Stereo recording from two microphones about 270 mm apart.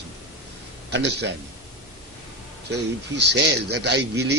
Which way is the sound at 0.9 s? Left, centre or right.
Right.